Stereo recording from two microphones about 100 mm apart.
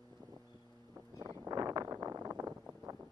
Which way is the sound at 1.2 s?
30° right (ahead or behind).